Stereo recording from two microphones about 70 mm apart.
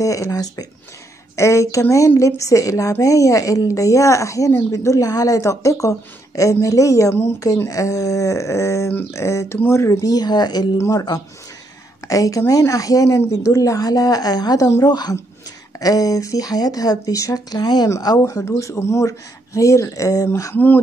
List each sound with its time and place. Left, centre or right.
0.0 s speech: left
1.3 s speech: left
10.0 s speech: left
10.8 s a woman's voice: left
15.8 s speech: left
18.5 s speech: left
20.5 s speech: left